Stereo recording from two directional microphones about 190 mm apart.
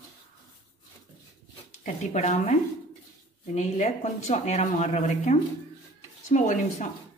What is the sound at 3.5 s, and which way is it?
Speech, 40° left (ahead or behind).